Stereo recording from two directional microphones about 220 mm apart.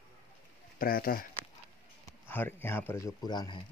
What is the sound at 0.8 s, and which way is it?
Speech, 40° left (ahead or behind).